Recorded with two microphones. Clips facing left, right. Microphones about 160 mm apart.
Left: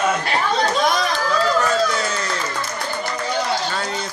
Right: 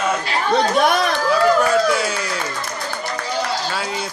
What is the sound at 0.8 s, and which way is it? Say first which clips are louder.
Chatter: right 3 dB; 60° right (ahead or behind).